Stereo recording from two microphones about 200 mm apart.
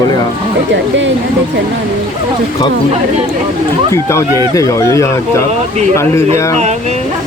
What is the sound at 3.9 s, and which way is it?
Speech, 15° left (ahead or behind).